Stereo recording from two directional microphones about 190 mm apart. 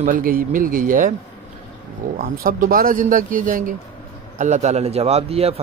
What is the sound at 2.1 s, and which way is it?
A man's voice, 50° right (ahead or behind).